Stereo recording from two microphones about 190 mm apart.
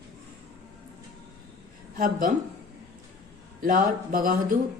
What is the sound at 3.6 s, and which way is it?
Speech, 45° right (ahead or behind).